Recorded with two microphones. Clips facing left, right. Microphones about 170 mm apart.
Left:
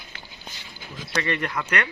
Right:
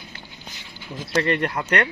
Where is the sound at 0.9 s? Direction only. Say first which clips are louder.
Right 6 dB; 50° right (ahead or behind).